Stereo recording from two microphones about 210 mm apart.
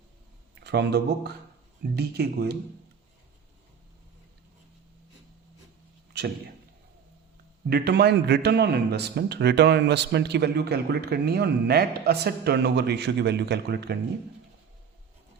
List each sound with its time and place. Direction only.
0.5 s a man's voice: 55° right (ahead or behind)
6.1 s a sound: 55° right (ahead or behind)
7.7 s a man's voice: 50° right (ahead or behind)